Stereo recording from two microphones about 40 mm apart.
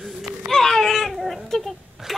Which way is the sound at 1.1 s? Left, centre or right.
Centre.